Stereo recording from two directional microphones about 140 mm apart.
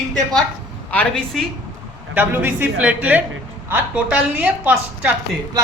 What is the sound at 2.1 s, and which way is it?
A woman's voice, 15° right (ahead or behind).